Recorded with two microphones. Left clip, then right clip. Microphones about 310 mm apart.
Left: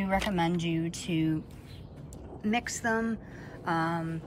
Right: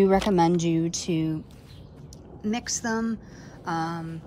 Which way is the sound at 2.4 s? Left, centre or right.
Centre.